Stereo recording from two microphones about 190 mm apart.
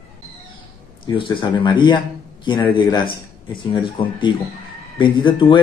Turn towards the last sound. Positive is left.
turn(degrees=25)  # may be behind; listen again after turning